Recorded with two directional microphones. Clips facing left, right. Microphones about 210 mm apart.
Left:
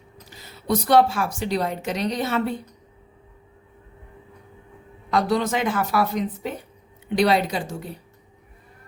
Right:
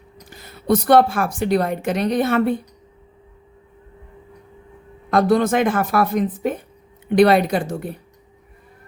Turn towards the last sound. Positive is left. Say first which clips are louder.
# right 6 dB
turn(degrees=-55)  # may be behind; listen again after turning